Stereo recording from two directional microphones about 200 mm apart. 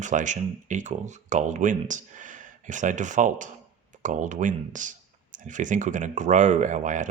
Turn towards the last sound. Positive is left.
turn(degrees=-40)  # may be behind; listen again after turning